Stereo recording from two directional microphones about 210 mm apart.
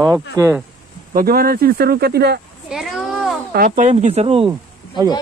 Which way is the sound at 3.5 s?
35° right (ahead or behind).